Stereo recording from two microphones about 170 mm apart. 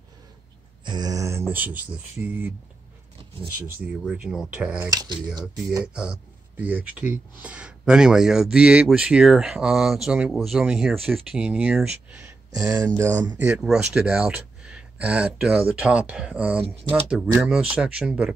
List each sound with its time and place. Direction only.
0.8 s speech: 25° right (ahead or behind)
3.7 s speech: 5° right (ahead or behind)
4.8 s speech: 25° right (ahead or behind)
5.9 s speech: 10° right (ahead or behind)
12.5 s speech: 20° right (ahead or behind)